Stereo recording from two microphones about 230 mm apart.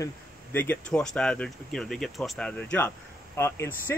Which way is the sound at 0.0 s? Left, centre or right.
Centre.